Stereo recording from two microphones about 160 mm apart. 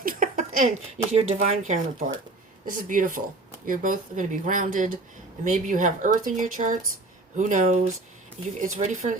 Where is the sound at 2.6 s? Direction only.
55° right (ahead or behind).